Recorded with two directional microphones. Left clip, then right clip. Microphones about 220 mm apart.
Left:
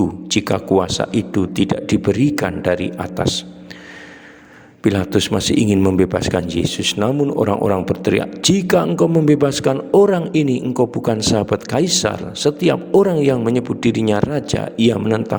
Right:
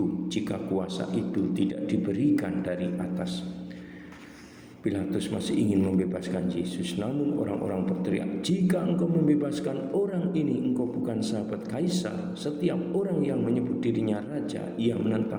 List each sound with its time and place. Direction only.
0.3 s speech: 50° left (ahead or behind)
4.8 s speech: 50° left (ahead or behind)